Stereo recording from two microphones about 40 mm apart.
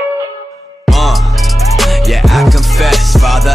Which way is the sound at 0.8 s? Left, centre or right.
Centre.